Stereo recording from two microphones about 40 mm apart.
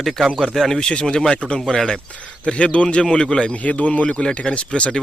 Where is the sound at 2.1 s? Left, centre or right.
Left.